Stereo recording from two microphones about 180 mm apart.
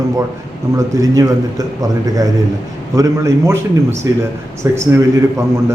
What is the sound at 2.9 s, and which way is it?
A man's voice, 15° right (ahead or behind).